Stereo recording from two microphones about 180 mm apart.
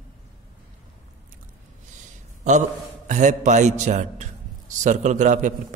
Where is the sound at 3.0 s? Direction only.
40° right (ahead or behind).